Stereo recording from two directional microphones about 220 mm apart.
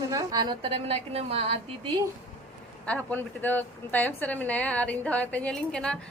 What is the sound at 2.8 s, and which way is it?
A woman's voice, 5° left (ahead or behind).